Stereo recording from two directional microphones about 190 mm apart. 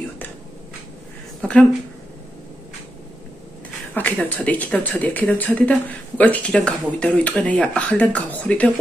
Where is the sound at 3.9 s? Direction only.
10° left (ahead or behind).